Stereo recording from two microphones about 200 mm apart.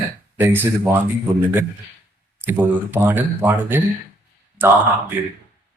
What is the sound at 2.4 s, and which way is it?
Speech, 10° right (ahead or behind).